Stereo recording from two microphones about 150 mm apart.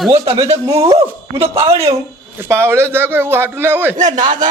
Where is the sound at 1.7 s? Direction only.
20° right (ahead or behind).